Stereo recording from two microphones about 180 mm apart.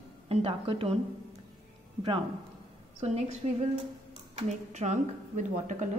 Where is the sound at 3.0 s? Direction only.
35° right (ahead or behind).